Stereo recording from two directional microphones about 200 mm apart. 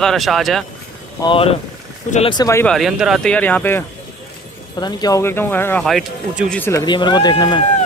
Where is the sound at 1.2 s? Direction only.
25° left (ahead or behind).